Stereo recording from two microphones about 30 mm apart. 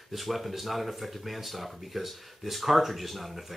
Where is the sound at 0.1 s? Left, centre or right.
Centre.